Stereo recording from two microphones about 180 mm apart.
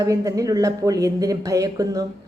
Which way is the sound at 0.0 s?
20° right (ahead or behind).